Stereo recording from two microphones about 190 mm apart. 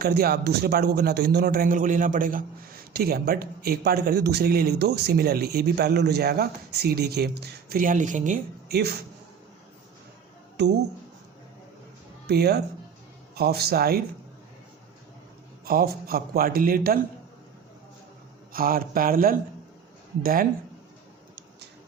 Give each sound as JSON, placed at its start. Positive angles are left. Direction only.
{"t": 0.0, "sound": "a man's voice", "side_deg": -55}
{"t": 10.6, "sound": "a man's voice", "side_deg": -60}
{"t": 12.3, "sound": "a man's voice", "side_deg": -55}
{"t": 15.6, "sound": "a man's voice", "side_deg": -55}
{"t": 18.5, "sound": "a man's voice", "side_deg": -50}